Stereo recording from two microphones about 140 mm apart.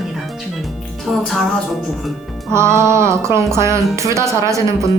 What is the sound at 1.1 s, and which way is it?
Speech, centre (ahead or behind).